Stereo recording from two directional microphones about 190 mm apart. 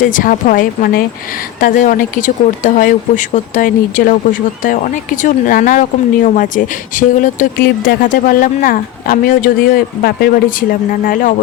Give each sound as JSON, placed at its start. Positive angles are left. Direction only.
{"t": 0.0, "sound": "speech", "side_deg": 45}